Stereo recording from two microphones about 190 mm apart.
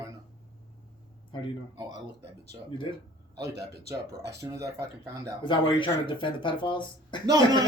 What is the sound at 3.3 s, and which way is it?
Speech, 20° right (ahead or behind).